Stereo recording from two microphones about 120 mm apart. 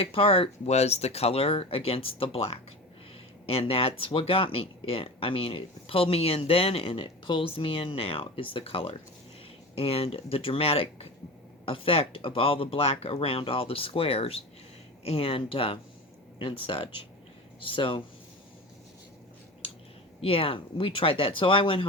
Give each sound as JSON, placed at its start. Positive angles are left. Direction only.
{"t": 0.0, "sound": "speech", "side_deg": 50}
{"t": 20.2, "sound": "speech", "side_deg": 50}